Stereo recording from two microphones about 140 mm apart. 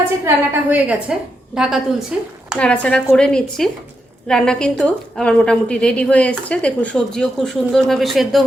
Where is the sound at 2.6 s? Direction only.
10° left (ahead or behind).